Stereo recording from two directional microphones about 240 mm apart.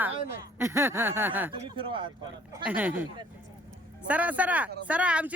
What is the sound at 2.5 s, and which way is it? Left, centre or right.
Speech, centre.